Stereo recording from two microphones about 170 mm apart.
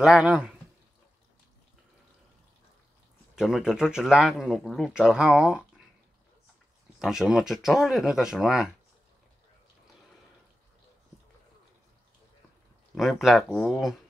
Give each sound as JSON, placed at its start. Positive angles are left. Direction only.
{"t": 0.0, "sound": "speech", "side_deg": -5}
{"t": 3.3, "sound": "speech", "side_deg": -5}
{"t": 7.0, "sound": "speech", "side_deg": -5}
{"t": 12.9, "sound": "speech", "side_deg": 0}